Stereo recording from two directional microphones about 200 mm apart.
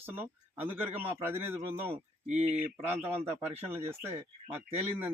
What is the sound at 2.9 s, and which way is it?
A man's voice, 10° right (ahead or behind).